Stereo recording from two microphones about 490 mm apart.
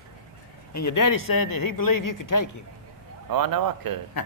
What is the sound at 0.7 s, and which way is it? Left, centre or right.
Speech, left.